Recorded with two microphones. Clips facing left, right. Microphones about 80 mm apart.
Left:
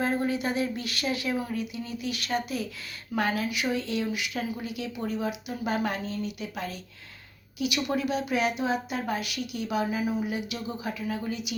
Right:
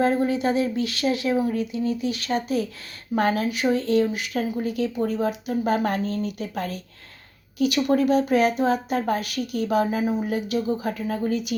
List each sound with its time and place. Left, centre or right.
0.0 s a woman's voice: right